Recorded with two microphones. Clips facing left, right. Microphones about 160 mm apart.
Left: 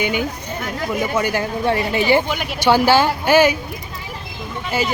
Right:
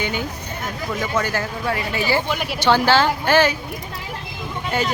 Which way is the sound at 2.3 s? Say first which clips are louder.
Even; centre (ahead or behind).